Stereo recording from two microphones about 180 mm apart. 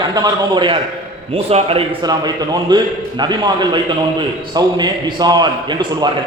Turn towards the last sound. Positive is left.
turn(degrees=-25)  # may be behind; listen again after turning